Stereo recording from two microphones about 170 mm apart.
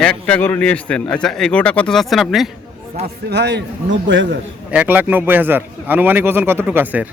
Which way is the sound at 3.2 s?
85° right.